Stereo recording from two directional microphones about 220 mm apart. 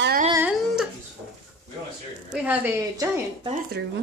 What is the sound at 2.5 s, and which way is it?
A woman's voice, 10° right (ahead or behind).